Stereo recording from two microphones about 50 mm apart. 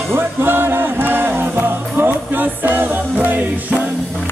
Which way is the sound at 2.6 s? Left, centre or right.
Right.